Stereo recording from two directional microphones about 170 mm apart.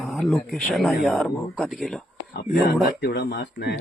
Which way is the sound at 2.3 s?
70° left (ahead or behind).